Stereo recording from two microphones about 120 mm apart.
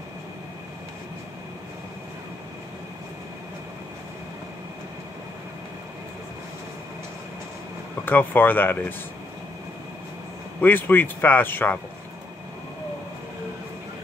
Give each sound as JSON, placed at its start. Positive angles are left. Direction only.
{"t": 8.0, "sound": "speech", "side_deg": 15}
{"t": 10.6, "sound": "speech", "side_deg": 15}